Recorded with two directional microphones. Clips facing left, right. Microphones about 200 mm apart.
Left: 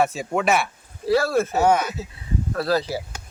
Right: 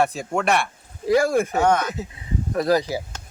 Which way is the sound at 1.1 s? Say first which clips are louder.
Right 1 dB; 15° right (ahead or behind).